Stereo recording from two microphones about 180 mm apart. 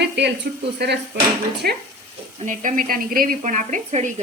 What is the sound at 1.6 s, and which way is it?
Speech, 55° right (ahead or behind).